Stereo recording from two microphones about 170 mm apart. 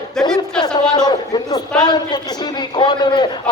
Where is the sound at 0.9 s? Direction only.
25° left (ahead or behind).